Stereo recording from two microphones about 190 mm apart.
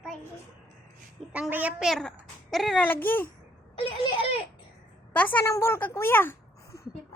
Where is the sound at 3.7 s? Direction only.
30° left (ahead or behind).